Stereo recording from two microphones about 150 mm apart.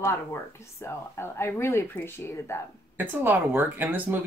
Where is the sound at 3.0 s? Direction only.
15° right (ahead or behind).